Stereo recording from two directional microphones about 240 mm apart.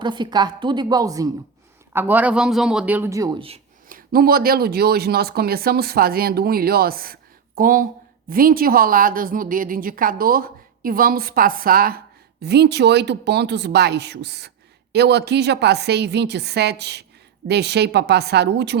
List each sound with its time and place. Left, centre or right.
0.0 s a man's voice: centre
3.8 s speech: right